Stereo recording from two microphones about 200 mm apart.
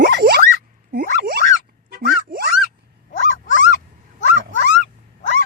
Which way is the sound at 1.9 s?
50° right (ahead or behind).